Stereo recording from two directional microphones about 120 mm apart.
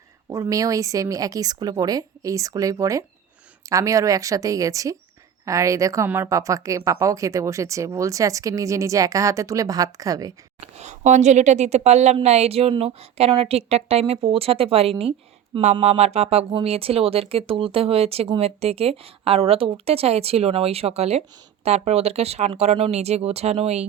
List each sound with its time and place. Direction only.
0.3 s speech: 25° right (ahead or behind)
10.6 s a woman's voice: 70° right (ahead or behind); by 15.1 s 50° right (ahead or behind)
15.6 s a woman's voice: 65° right (ahead or behind)